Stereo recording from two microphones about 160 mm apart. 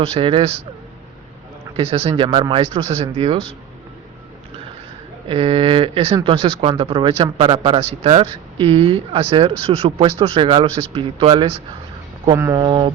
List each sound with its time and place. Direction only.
0.0 s speech: 35° right (ahead or behind)
1.7 s speech: 35° right (ahead or behind)
5.3 s speech: 35° right (ahead or behind)
12.4 s speech: 20° right (ahead or behind)